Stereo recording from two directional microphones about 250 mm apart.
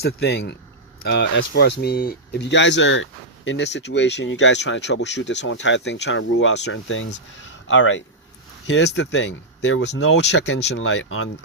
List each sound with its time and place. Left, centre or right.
0.0 s speech: left